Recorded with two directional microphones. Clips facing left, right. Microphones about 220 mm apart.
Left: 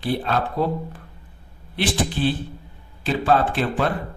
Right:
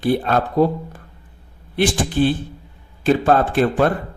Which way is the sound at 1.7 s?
50° right (ahead or behind).